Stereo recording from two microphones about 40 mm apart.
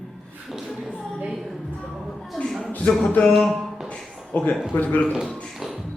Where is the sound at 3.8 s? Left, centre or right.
Left.